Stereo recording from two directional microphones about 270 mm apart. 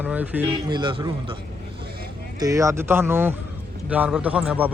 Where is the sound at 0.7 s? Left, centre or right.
Centre.